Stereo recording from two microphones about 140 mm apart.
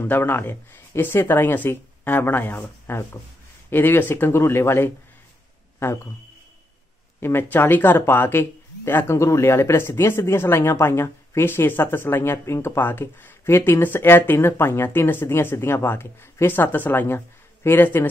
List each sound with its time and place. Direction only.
0.0 s speech: 15° left (ahead or behind)
7.2 s speech: 15° left (ahead or behind)